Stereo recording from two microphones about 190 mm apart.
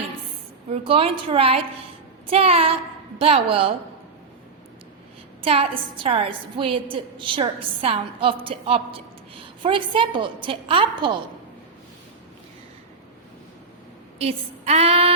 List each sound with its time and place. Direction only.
0.7 s a woman's voice: 30° right (ahead or behind)
5.4 s a woman's voice: 30° right (ahead or behind)
14.2 s a sound: 35° right (ahead or behind)